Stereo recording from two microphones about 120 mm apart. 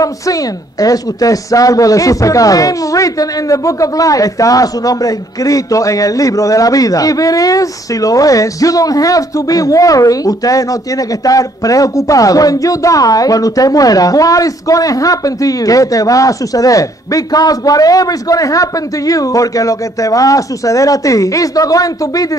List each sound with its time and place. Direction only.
0.0 s speech: 30° left (ahead or behind)